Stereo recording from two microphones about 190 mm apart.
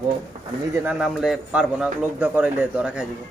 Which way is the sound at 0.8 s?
Centre (ahead or behind).